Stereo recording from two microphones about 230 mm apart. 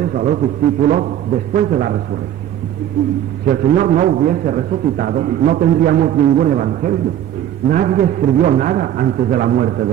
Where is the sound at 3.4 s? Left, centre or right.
Right.